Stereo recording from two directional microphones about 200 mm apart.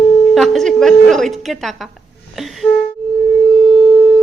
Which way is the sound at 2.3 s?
Centre (ahead or behind).